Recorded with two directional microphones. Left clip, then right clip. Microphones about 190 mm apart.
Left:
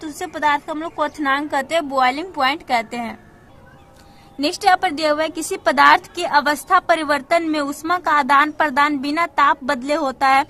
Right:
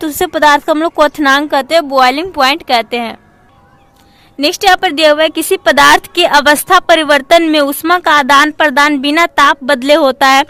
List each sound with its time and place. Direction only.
0.0 s a woman's voice: 35° right (ahead or behind)
4.4 s a woman's voice: 20° right (ahead or behind)